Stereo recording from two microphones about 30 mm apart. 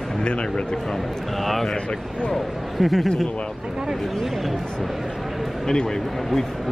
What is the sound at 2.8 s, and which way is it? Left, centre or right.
Speech, centre.